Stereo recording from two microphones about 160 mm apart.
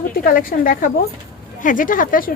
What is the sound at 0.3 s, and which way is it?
A woman's voice, 60° left (ahead or behind).